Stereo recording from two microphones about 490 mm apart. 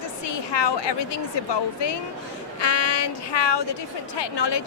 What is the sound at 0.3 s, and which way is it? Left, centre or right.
Speech, left.